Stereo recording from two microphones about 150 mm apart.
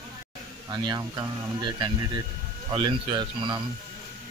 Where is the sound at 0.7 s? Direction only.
30° right (ahead or behind).